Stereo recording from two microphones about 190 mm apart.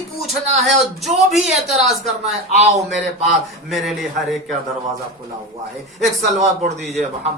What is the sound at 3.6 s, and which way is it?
Speech, centre (ahead or behind).